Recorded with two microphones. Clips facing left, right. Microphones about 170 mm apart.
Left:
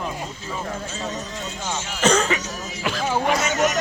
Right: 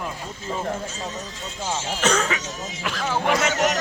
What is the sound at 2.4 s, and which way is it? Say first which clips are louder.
Music: left 1 dB; 25° right (ahead or behind).